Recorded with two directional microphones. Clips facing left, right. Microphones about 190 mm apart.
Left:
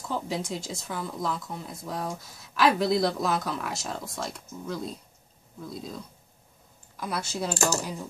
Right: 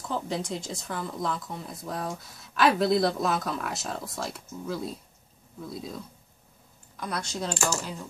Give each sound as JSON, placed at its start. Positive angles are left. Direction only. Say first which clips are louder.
{"t": 0.1, "sound": "speech", "louder": "even", "side_deg": 5}
{"t": 7.5, "sound": "speech", "louder": "left 3 dB", "side_deg": 40}